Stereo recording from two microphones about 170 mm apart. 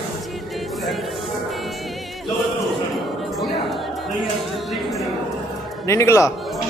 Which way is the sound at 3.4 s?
Centre (ahead or behind).